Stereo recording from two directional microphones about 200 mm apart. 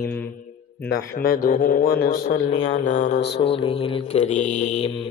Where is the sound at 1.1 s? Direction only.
45° left (ahead or behind).